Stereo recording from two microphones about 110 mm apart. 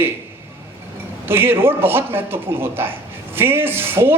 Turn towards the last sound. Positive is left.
turn(degrees=-20)  # may be behind; listen again after turning